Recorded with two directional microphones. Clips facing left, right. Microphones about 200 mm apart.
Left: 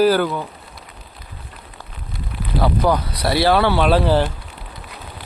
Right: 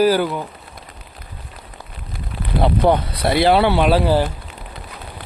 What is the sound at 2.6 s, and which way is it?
Speech, 25° right (ahead or behind).